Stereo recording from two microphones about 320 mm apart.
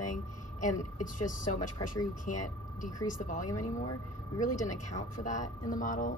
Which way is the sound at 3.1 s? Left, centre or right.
Left.